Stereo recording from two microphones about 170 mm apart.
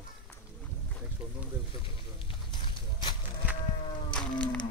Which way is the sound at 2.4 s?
25° left (ahead or behind).